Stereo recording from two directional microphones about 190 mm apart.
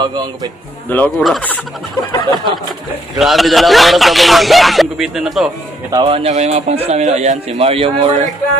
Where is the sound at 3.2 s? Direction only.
Centre (ahead or behind).